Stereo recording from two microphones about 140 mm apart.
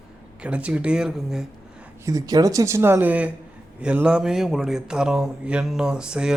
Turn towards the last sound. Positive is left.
turn(degrees=-5)  # may be behind; listen again after turning